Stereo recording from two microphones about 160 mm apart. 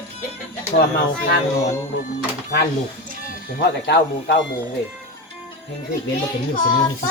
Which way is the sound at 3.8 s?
90° left.